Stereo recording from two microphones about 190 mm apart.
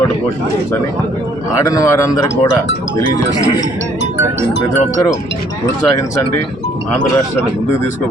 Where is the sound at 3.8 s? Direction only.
75° left (ahead or behind).